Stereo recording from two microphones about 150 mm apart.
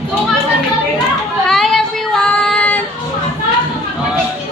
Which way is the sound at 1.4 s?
5° left (ahead or behind).